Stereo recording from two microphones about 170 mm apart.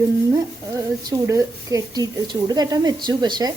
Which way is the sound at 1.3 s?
20° right (ahead or behind).